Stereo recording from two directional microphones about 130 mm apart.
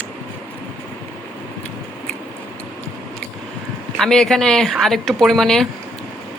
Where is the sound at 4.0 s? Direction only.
5° left (ahead or behind).